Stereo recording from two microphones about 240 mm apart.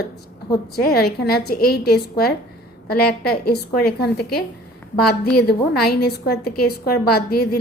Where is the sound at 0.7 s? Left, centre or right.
Left.